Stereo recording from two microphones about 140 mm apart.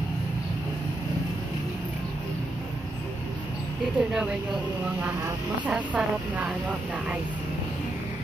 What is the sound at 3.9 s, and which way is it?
Speech, 5° right (ahead or behind).